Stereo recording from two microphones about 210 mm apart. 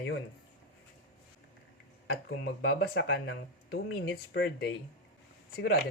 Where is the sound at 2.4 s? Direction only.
50° left (ahead or behind).